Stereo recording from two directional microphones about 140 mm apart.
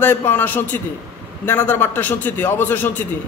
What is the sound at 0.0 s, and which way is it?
A man's voice, 15° left (ahead or behind).